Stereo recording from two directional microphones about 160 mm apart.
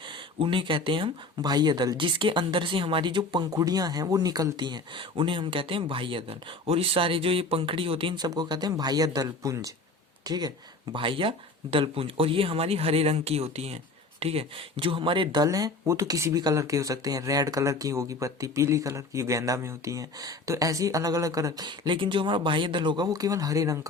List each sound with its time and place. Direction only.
0.0 s speech: 30° right (ahead or behind)